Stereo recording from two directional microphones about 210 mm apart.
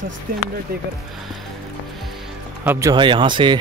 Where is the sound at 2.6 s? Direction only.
10° right (ahead or behind).